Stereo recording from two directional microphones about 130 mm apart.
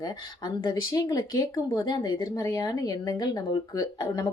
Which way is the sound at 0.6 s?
30° left (ahead or behind).